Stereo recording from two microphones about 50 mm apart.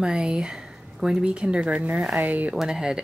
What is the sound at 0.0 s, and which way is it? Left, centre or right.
A woman's voice, centre.